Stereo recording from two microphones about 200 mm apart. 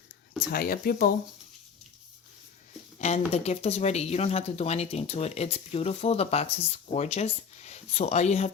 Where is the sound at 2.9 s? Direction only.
35° left (ahead or behind).